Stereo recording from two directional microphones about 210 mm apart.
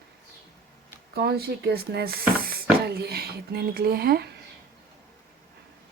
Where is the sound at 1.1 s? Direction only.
50° right (ahead or behind).